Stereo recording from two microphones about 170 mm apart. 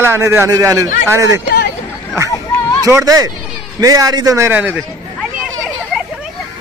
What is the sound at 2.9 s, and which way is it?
A man's voice, 20° right (ahead or behind).